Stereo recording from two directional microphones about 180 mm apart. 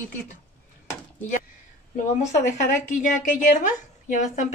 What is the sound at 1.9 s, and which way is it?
A woman's voice, 45° left (ahead or behind).